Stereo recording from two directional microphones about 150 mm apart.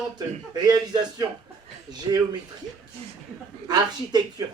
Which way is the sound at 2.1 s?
30° right (ahead or behind).